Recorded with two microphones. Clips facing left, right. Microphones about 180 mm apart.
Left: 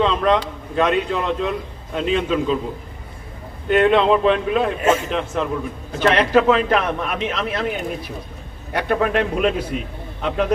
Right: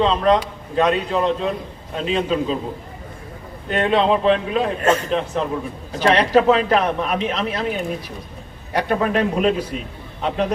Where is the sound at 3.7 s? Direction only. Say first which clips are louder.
Left 3 dB; 35° right (ahead or behind).